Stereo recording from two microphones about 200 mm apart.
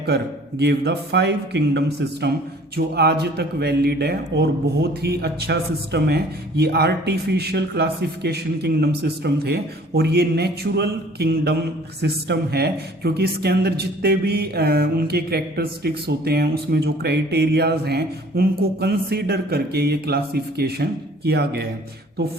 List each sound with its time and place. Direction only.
0.6 s a man's voice: 55° right (ahead or behind)